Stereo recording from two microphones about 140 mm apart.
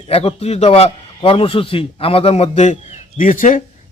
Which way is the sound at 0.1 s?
45° left (ahead or behind).